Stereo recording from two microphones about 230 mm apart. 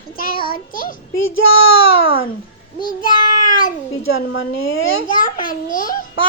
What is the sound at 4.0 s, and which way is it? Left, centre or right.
Speech, left.